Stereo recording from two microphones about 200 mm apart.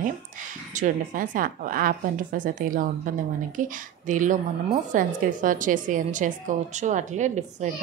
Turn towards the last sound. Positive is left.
turn(degrees=-35)  # may be behind; listen again after turning